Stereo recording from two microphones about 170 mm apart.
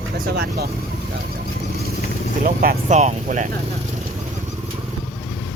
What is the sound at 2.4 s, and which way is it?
Speech, 55° right (ahead or behind).